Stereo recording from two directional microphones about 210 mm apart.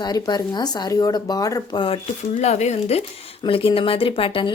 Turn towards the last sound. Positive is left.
turn(degrees=25)  # may be behind; listen again after turning